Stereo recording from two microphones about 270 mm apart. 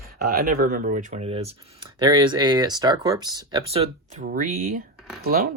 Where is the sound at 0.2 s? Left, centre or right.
Right.